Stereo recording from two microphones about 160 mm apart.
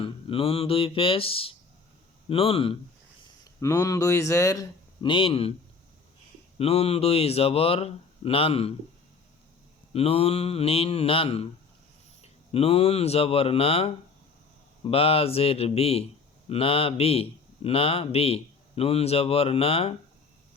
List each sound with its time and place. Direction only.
0.0 s a man's voice: 35° left (ahead or behind)
3.6 s speech: 20° left (ahead or behind); by 5.5 s 35° left (ahead or behind)
6.6 s a man's voice: 40° left (ahead or behind)
9.9 s a man's voice: 40° left (ahead or behind)